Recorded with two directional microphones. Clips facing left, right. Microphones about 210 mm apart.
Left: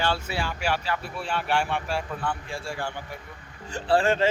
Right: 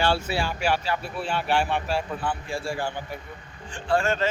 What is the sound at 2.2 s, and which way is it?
Speech, 5° right (ahead or behind).